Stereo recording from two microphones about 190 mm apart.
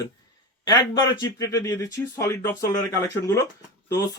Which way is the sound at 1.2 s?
20° left (ahead or behind).